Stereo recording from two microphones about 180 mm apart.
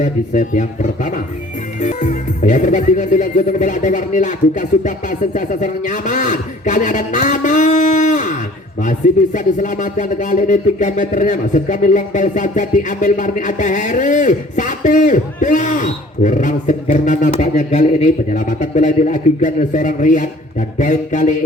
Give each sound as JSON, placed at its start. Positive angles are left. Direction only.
{"t": 0.0, "sound": "speech", "side_deg": 45}